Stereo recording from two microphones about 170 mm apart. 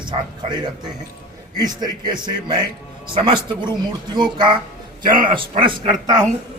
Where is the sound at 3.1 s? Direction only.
30° right (ahead or behind).